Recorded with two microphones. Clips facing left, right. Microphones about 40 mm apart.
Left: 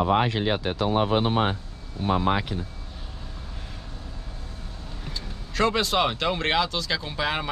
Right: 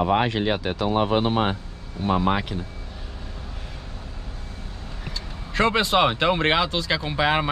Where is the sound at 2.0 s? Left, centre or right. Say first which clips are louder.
Right 1 dB; right.